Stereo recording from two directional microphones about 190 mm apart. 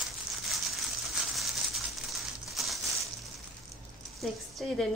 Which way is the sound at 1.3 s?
Centre (ahead or behind).